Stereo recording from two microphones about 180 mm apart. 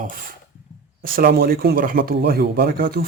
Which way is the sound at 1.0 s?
60° right (ahead or behind).